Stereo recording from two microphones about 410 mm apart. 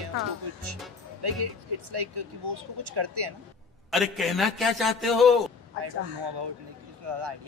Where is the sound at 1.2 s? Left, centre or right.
Right.